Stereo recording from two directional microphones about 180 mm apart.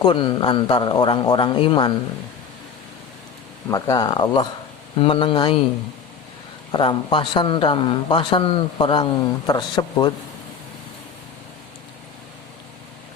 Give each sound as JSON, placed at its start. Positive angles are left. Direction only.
{"t": 0.0, "sound": "speech", "side_deg": 25}
{"t": 3.7, "sound": "speech", "side_deg": 20}
{"t": 6.7, "sound": "speech", "side_deg": 25}